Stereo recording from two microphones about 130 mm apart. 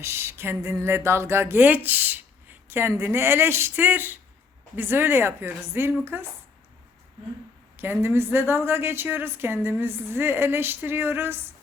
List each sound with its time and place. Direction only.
0.0 s speech: 20° right (ahead or behind)
7.8 s speech: 20° right (ahead or behind)